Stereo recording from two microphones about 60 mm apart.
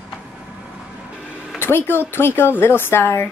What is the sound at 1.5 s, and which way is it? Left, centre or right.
Speech, left.